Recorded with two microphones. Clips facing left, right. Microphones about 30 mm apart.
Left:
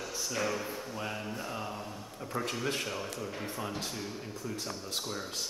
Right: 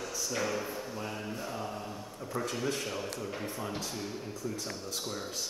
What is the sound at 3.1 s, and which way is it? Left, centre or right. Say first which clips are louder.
Speech: right 1 dB; centre.